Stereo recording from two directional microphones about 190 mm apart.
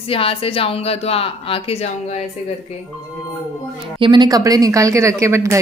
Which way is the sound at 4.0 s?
25° right (ahead or behind).